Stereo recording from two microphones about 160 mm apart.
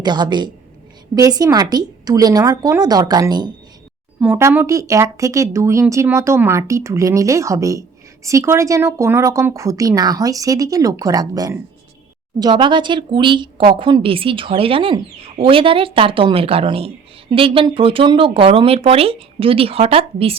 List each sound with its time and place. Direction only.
0.0 s speech: 25° right (ahead or behind)
4.2 s a woman's voice: 15° right (ahead or behind); by 20.3 s 35° right (ahead or behind)